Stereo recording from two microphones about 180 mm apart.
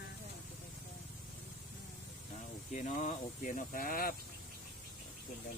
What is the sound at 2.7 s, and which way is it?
Speech, 45° left (ahead or behind).